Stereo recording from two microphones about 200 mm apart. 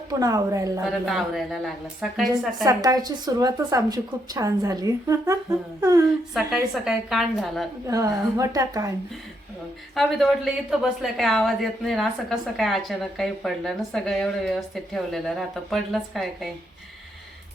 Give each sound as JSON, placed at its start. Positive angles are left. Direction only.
{"t": 0.1, "sound": "a woman's voice", "side_deg": -15}
{"t": 0.9, "sound": "a woman's voice", "side_deg": 0}
{"t": 2.6, "sound": "a woman's voice", "side_deg": -20}
{"t": 6.5, "sound": "a woman's voice", "side_deg": 0}
{"t": 7.9, "sound": "a woman's voice", "side_deg": -15}
{"t": 9.9, "sound": "a woman's voice", "side_deg": 0}